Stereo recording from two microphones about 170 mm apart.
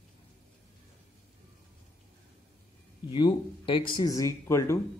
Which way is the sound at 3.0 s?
30° left (ahead or behind).